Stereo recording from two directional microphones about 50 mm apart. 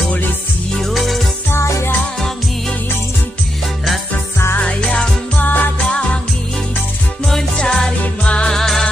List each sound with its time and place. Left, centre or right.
0.7 s music: centre
1.5 s music: left
4.6 s music: centre
5.4 s music: left
7.2 s music: centre
8.5 s music: centre